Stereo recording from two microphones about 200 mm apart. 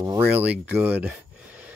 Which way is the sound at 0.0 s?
10° right (ahead or behind).